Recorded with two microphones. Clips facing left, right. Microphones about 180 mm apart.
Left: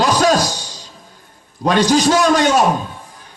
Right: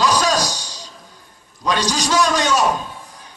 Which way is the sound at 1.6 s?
50° left (ahead or behind).